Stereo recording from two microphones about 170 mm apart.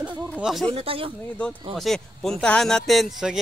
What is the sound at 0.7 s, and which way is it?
Speech, 35° right (ahead or behind).